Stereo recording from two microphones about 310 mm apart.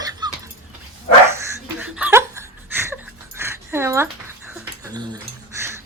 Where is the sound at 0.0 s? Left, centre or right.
Centre.